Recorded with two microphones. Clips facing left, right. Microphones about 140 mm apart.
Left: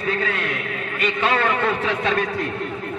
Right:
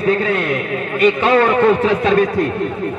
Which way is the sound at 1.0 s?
40° right (ahead or behind).